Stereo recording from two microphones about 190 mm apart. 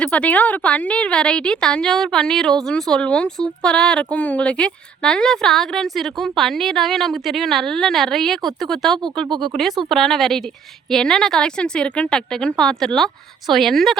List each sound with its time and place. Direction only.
0.0 s a woman's voice: 5° left (ahead or behind)